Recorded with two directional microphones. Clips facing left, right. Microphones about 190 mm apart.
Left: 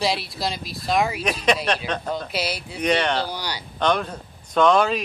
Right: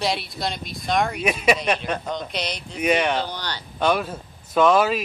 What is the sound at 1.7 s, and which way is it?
Speech, 10° right (ahead or behind).